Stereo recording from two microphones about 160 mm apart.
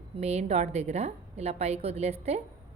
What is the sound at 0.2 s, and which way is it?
A woman's voice, 40° right (ahead or behind).